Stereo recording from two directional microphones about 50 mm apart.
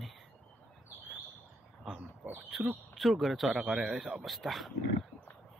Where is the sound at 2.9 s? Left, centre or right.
Centre.